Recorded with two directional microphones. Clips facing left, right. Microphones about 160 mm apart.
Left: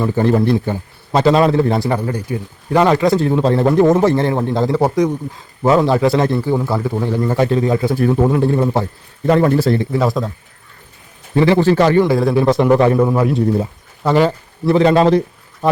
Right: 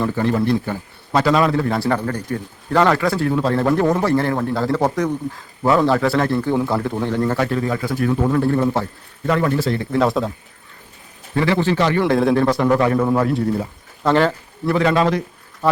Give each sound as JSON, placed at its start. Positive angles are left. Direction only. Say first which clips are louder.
{"t": 0.2, "sound": "a man's voice", "louder": "left 6 dB", "side_deg": 30}
{"t": 6.6, "sound": "a man's voice", "louder": "left 1 dB", "side_deg": 5}
{"t": 7.3, "sound": "a man's voice", "louder": "left 5 dB", "side_deg": 20}
{"t": 9.2, "sound": "a man's voice", "louder": "left 6 dB", "side_deg": 35}
{"t": 9.9, "sound": "speech", "louder": "even", "side_deg": 0}
{"t": 11.3, "sound": "a man's voice", "louder": "left 6 dB", "side_deg": 30}
{"t": 12.0, "sound": "speech", "louder": "left 1 dB", "side_deg": 5}
{"t": 12.4, "sound": "a man's voice", "louder": "left 4 dB", "side_deg": 20}
{"t": 14.7, "sound": "a man's voice", "louder": "left 6 dB", "side_deg": 30}
{"t": 15.6, "sound": "speech", "louder": "left 2 dB", "side_deg": 15}